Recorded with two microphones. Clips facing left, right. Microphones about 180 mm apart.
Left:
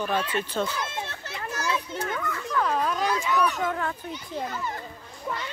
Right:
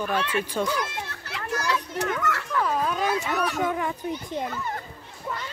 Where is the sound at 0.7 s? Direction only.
25° left (ahead or behind).